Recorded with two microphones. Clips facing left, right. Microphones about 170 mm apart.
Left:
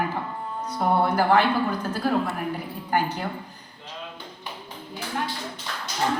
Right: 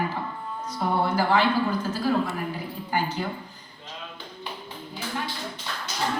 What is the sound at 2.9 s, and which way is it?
Speech, 60° left (ahead or behind).